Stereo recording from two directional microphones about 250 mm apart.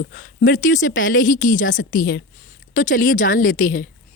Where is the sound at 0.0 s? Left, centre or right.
Left.